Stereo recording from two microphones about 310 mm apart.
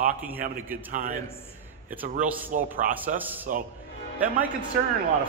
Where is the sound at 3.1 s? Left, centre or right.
Centre.